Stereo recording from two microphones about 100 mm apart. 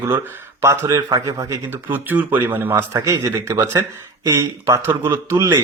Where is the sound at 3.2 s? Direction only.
30° right (ahead or behind).